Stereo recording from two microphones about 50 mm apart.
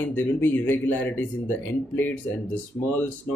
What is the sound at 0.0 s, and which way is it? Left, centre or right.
Speech, left.